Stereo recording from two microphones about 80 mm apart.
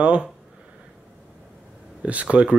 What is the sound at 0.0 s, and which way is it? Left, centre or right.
Speech, centre.